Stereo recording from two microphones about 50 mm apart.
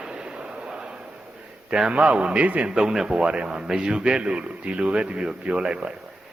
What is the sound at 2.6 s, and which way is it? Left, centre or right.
A man's voice, centre.